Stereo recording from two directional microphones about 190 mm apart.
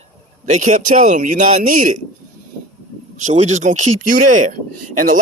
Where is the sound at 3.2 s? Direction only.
40° right (ahead or behind).